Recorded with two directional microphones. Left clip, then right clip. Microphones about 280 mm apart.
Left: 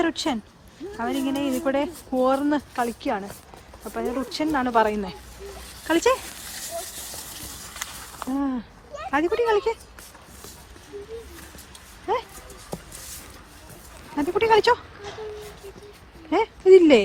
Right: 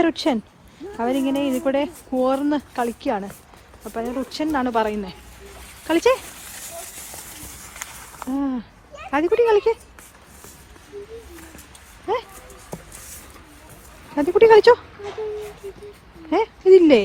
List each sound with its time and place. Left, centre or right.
0.0 s speech: right
7.6 s walk: centre
8.3 s speech: centre
12.1 s speech: centre
14.2 s speech: centre
16.3 s speech: centre